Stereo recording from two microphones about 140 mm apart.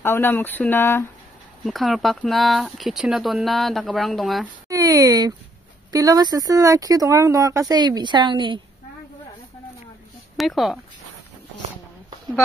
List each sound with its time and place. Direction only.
0.0 s speech: 15° left (ahead or behind)
1.6 s speech: centre (ahead or behind)
4.6 s speech: 25° right (ahead or behind)
10.3 s speech: centre (ahead or behind)